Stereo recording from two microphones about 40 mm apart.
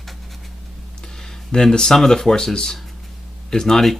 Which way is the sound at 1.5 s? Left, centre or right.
Centre.